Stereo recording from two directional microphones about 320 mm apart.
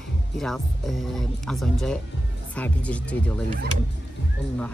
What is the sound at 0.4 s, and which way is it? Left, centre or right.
Speech, centre.